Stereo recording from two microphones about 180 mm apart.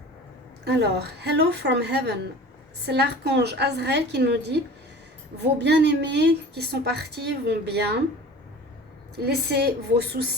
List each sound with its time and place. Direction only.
0.6 s a woman's voice: 65° right (ahead or behind)
9.1 s a woman's voice: 65° right (ahead or behind)